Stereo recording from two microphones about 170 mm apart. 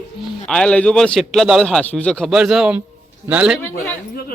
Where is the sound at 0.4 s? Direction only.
5° left (ahead or behind).